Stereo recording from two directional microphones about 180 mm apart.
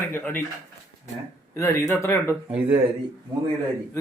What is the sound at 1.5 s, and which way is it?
Speech, 15° left (ahead or behind).